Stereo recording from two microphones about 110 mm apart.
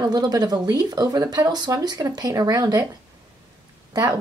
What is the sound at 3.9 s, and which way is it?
Speech, 30° right (ahead or behind).